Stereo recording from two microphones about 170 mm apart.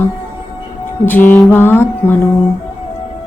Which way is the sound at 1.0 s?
10° left (ahead or behind).